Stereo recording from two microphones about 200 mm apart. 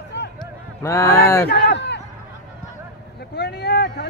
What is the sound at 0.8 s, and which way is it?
Speech, 15° left (ahead or behind).